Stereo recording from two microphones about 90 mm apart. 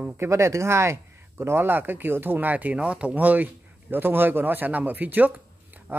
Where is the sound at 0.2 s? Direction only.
30° right (ahead or behind).